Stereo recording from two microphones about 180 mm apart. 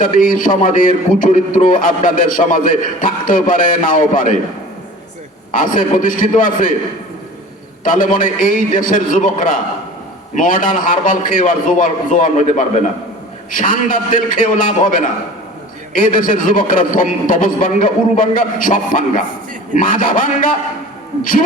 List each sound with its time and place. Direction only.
0.0 s a man's voice: 50° left (ahead or behind)
5.7 s a man's voice: 50° left (ahead or behind)
7.9 s a man's voice: 50° left (ahead or behind)